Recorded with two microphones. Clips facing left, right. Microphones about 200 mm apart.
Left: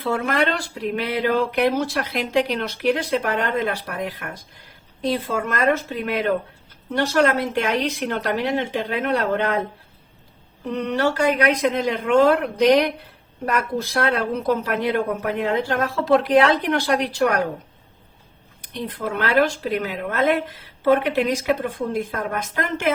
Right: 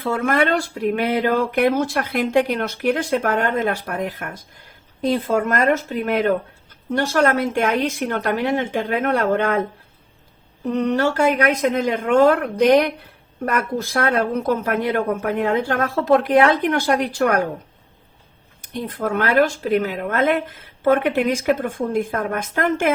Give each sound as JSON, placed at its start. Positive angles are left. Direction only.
{"t": 0.0, "sound": "speech", "side_deg": -50}
{"t": 6.1, "sound": "speech", "side_deg": -50}
{"t": 10.7, "sound": "speech", "side_deg": -45}
{"t": 18.6, "sound": "speech", "side_deg": -45}